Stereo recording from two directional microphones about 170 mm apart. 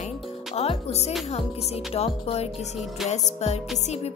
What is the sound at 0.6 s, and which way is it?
Music, 35° left (ahead or behind).